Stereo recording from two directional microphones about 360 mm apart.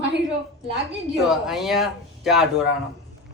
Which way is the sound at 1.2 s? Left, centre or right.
Centre.